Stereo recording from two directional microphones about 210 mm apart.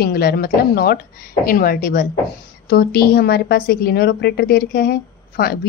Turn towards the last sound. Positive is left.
turn(degrees=45)  # may be behind; listen again after turning